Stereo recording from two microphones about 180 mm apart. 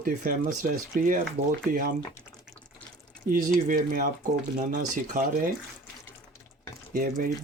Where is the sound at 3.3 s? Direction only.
50° right (ahead or behind).